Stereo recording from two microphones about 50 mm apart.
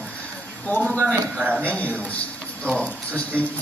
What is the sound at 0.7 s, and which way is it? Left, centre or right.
Speech, left.